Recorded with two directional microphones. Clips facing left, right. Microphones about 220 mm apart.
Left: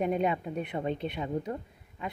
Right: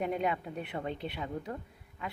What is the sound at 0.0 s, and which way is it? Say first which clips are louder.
A woman's voice: left 4 dB; 20° left (ahead or behind).